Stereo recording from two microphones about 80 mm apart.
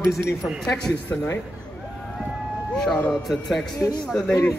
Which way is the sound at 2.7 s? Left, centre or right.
Centre.